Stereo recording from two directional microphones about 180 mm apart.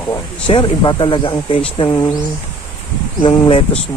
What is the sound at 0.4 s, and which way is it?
Speech, 25° left (ahead or behind).